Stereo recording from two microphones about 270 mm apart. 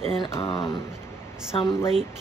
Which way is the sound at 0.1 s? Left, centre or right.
Centre.